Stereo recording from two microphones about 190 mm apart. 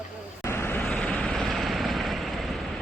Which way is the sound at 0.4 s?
15° left (ahead or behind).